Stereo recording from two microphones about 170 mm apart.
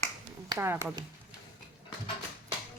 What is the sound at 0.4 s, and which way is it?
Speech, 20° right (ahead or behind).